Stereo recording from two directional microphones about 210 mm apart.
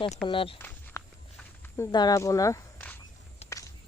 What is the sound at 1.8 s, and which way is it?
Speech, 20° left (ahead or behind).